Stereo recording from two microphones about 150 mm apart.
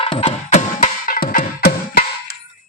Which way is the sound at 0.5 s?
65° left (ahead or behind).